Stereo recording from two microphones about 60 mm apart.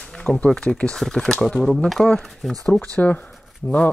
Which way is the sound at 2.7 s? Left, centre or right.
Left.